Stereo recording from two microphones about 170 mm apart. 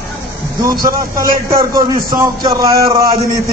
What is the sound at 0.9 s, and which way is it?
A man's voice, 20° right (ahead or behind).